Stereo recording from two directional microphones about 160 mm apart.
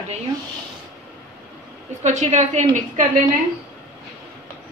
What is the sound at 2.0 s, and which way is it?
Speech, 45° right (ahead or behind).